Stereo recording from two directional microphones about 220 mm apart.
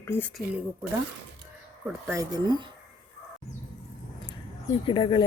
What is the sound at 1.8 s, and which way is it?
Speech, 10° right (ahead or behind).